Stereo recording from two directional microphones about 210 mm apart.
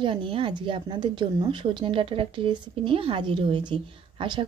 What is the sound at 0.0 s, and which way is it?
Speech, 25° right (ahead or behind).